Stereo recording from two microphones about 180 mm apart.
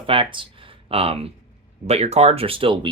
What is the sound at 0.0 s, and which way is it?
Speech, 30° right (ahead or behind).